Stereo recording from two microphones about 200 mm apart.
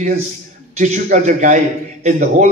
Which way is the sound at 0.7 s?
35° right (ahead or behind).